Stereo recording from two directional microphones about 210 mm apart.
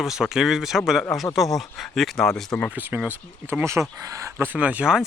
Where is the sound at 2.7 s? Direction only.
10° right (ahead or behind).